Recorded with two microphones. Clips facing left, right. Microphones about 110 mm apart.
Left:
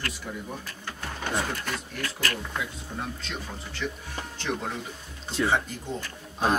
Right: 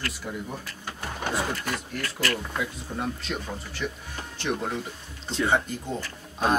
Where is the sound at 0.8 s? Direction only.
10° right (ahead or behind).